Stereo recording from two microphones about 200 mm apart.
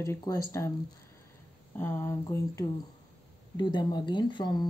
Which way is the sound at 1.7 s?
10° left (ahead or behind).